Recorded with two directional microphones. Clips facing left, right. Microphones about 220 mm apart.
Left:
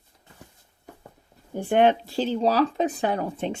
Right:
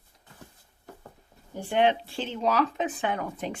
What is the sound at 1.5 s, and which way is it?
Speech, 50° left (ahead or behind).